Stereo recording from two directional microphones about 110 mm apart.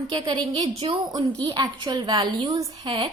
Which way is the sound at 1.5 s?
45° right (ahead or behind).